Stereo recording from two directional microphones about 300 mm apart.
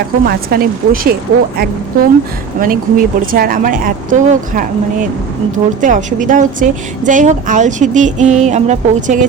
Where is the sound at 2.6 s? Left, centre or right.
Right.